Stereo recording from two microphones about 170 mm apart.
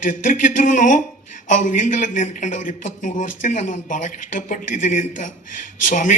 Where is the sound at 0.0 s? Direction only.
50° left (ahead or behind).